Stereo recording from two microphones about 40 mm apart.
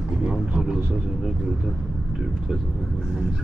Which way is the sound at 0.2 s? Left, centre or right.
Centre.